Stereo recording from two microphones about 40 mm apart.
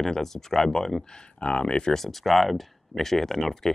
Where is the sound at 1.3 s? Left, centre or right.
Left.